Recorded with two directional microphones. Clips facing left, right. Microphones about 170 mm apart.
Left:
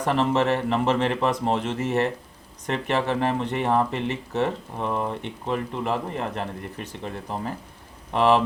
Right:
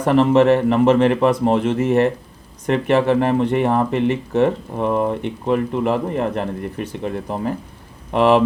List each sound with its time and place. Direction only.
0.0 s speech: 55° right (ahead or behind)